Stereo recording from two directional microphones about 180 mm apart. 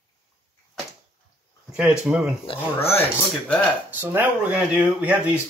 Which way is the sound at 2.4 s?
30° left (ahead or behind).